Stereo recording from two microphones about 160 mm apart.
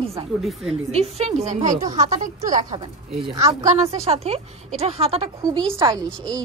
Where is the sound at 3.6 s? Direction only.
40° right (ahead or behind).